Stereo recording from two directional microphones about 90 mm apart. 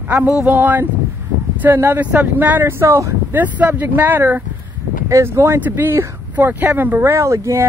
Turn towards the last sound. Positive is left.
turn(degrees=-35)  # may be behind; listen again after turning